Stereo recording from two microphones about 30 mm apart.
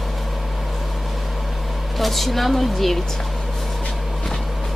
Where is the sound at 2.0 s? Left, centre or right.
Centre.